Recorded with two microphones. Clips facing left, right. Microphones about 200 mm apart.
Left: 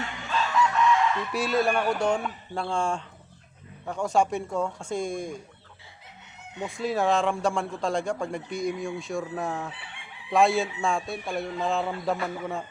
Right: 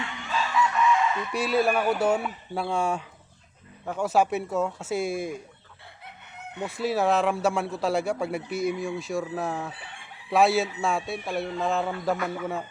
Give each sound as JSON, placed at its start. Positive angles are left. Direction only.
{"t": 0.3, "sound": "chicken", "side_deg": -5}
{"t": 3.8, "sound": "speech", "side_deg": -5}
{"t": 6.6, "sound": "speech", "side_deg": -5}